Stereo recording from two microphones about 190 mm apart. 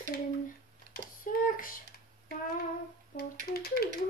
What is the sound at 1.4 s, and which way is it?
Speech, 45° left (ahead or behind).